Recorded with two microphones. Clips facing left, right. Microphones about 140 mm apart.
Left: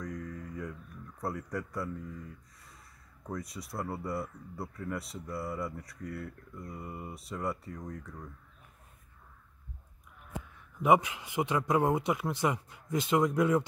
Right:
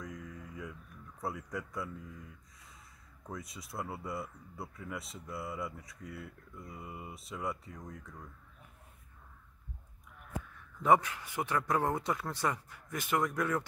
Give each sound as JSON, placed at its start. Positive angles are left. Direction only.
{"t": 0.0, "sound": "a sound", "side_deg": 0}
{"t": 1.2, "sound": "speech", "side_deg": 0}
{"t": 3.3, "sound": "speech", "side_deg": 0}
{"t": 10.8, "sound": "speech", "side_deg": 15}